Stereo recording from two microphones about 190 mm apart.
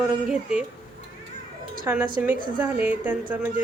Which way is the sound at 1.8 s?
10° right (ahead or behind).